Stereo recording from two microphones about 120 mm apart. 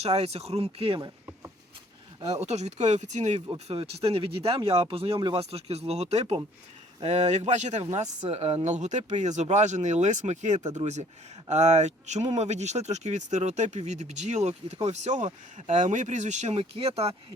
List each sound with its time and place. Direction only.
0.0 s speech: 60° right (ahead or behind)
2.3 s speech: 65° right (ahead or behind)
3.7 s speech: 55° right (ahead or behind); by 8.0 s 75° right (ahead or behind)
8.2 s speech: 60° right (ahead or behind)